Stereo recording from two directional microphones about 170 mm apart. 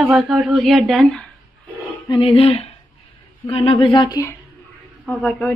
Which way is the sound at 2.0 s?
30° left (ahead or behind).